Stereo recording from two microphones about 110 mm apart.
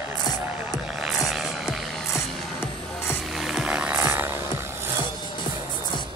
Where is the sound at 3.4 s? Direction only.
5° right (ahead or behind).